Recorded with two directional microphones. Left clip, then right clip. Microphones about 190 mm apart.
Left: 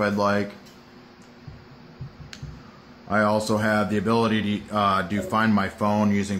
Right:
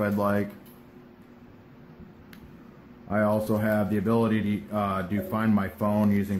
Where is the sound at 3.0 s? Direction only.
10° left (ahead or behind).